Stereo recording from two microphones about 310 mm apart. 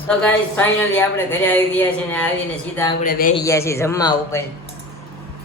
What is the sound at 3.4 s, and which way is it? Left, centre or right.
Speech, centre.